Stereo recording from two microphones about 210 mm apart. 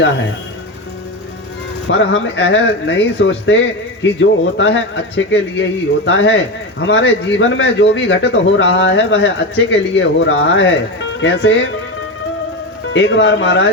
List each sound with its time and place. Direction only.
1.9 s speech: 60° left (ahead or behind)
12.9 s speech: 60° left (ahead or behind)